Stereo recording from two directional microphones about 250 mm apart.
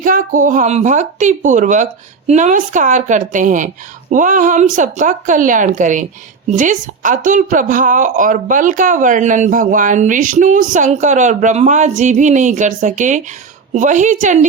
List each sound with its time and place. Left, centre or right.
0.0 s a woman's voice: right